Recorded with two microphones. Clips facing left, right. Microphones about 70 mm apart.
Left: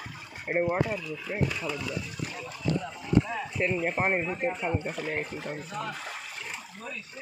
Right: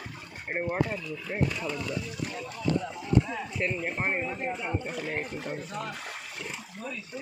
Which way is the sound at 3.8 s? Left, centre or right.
Centre.